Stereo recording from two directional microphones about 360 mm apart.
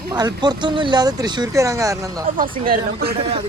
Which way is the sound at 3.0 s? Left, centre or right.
Right.